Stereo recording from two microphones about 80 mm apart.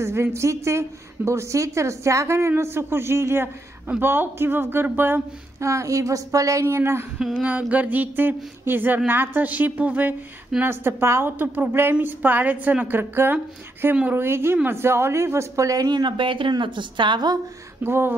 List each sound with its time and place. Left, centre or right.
0.0 s a woman's voice: right
5.6 s speech: right
6.6 s a woman's voice: right
7.2 s a sound: centre
7.4 s speech: centre; by 17.4 s right
17.8 s a woman's voice: right